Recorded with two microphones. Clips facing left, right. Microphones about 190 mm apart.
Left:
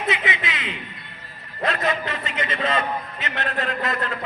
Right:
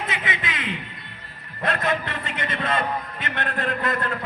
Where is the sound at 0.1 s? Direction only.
50° right (ahead or behind).